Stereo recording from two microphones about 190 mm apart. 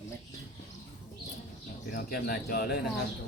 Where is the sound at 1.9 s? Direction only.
50° left (ahead or behind).